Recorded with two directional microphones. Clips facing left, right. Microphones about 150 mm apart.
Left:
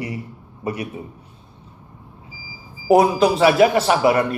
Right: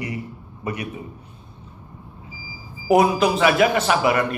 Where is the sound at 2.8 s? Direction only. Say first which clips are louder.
Left 2 dB; 30° left (ahead or behind).